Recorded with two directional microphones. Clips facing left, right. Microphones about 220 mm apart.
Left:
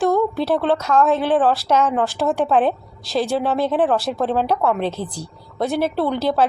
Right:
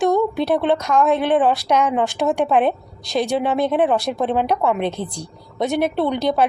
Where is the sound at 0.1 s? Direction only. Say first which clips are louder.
Right 1 dB; 15° right (ahead or behind).